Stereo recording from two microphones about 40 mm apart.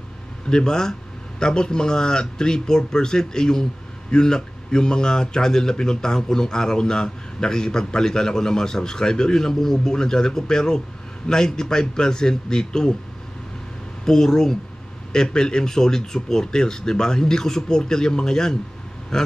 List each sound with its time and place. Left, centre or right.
0.5 s a man's voice: centre
14.0 s a man's voice: centre